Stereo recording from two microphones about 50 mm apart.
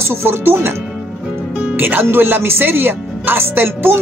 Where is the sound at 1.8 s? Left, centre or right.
Right.